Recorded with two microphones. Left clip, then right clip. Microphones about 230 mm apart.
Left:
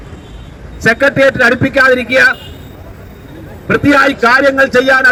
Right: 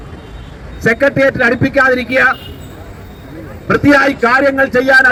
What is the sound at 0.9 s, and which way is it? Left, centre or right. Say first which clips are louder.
Speech: left 2 dB; left.